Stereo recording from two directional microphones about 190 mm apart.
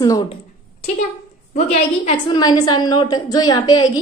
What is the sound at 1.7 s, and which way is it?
Speech, 35° left (ahead or behind).